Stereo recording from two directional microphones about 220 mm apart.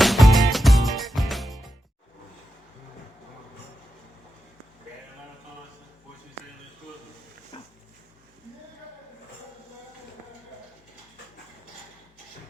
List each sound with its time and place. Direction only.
0.0 s music: centre (ahead or behind)
7.5 s dog: 25° left (ahead or behind)